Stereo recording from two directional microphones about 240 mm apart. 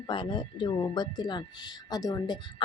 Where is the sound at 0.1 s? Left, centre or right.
Centre.